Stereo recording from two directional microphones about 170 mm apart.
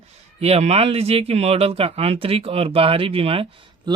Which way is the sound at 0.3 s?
35° right (ahead or behind).